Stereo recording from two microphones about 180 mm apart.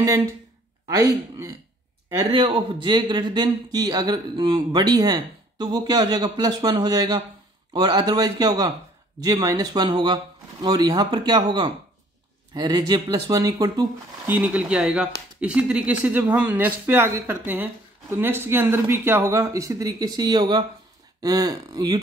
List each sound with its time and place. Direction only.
0.0 s speech: 15° right (ahead or behind)
2.3 s speech: 30° right (ahead or behind)
14.3 s speech: 10° right (ahead or behind)